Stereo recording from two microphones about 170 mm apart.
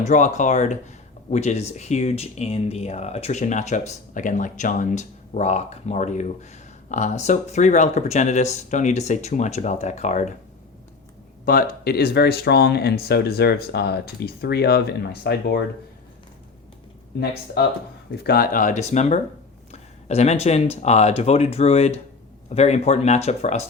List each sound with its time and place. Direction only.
0.0 s speech: 45° left (ahead or behind)
11.4 s speech: 60° left (ahead or behind)
17.2 s speech: 70° left (ahead or behind); by 23.6 s 40° left (ahead or behind)